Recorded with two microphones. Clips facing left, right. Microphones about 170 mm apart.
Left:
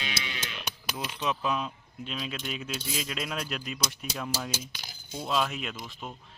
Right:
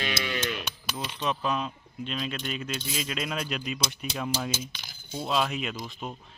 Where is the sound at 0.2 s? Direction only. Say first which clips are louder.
Right 8 dB; 55° right (ahead or behind).